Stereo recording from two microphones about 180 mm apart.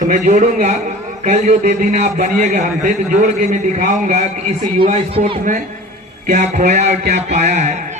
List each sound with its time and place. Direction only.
0.1 s a man's voice: 45° right (ahead or behind)
6.2 s a man's voice: 45° right (ahead or behind)